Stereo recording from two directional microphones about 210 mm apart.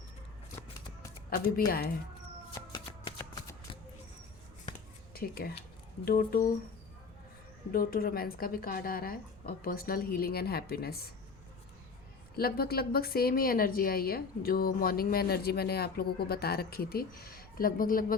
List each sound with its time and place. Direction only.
1.3 s a woman's voice: 45° left (ahead or behind)
2.6 s shuffling cards: 15° left (ahead or behind)
5.1 s a woman's voice: 45° left (ahead or behind)
7.7 s a woman's voice: 45° left (ahead or behind)
12.4 s a woman's voice: 45° left (ahead or behind)